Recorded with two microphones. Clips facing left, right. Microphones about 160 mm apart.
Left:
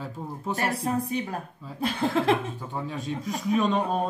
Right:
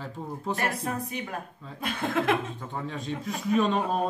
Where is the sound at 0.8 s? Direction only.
30° left (ahead or behind).